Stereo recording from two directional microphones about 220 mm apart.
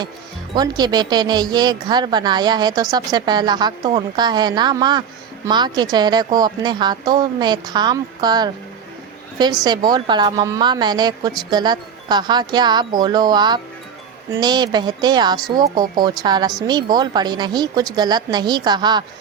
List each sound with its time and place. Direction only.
0.5 s a woman's voice: 20° right (ahead or behind)